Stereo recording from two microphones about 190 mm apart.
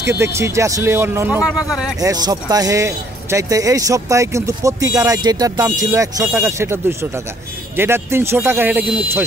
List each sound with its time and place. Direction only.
0.0 s speech: 15° right (ahead or behind)
2.0 s speech: 20° right (ahead or behind)